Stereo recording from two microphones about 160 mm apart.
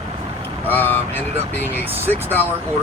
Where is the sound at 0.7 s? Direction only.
10° left (ahead or behind).